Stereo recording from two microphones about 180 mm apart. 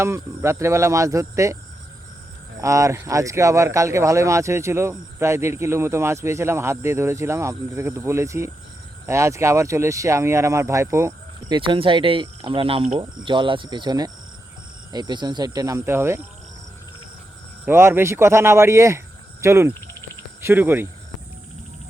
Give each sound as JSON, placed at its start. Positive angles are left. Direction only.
{"t": 0.0, "sound": "speech", "side_deg": -15}
{"t": 2.6, "sound": "speech", "side_deg": -15}
{"t": 17.7, "sound": "speech", "side_deg": -15}